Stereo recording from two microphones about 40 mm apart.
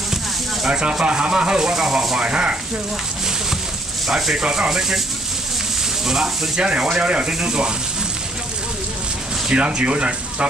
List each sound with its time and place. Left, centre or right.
0.7 s speech: right
2.1 s speech: right
4.4 s speech: right
4.6 s speech: centre
6.0 s speech: centre
6.6 s speech: right
9.5 s speech: right